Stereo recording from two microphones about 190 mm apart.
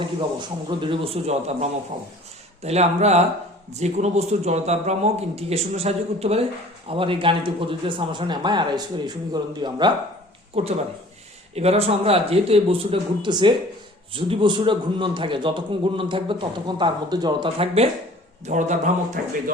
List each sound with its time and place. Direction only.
0.3 s a man's voice: 25° right (ahead or behind)
18.4 s a man's voice: 40° right (ahead or behind)